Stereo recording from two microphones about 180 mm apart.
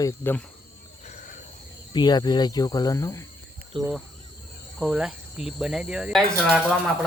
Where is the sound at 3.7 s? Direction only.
25° right (ahead or behind).